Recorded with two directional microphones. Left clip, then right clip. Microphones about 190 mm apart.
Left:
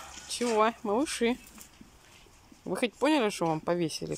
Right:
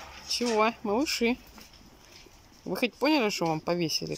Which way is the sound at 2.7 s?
Centre (ahead or behind).